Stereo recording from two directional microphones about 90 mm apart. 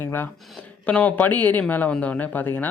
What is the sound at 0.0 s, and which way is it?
Speech, 25° left (ahead or behind).